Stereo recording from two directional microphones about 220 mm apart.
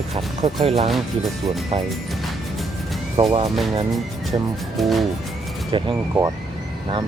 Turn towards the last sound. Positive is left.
turn(degrees=-15)  # may be behind; listen again after turning